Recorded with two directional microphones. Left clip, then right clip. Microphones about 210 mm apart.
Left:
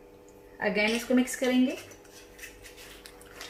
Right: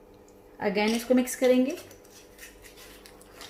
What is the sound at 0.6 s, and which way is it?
Speech, 35° right (ahead or behind).